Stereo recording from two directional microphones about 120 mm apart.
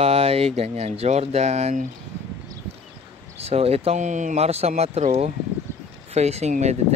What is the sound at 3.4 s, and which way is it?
Speech, 55° right (ahead or behind).